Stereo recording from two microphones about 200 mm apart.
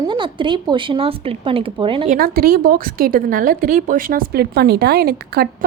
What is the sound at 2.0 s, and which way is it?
A woman's voice, 45° right (ahead or behind).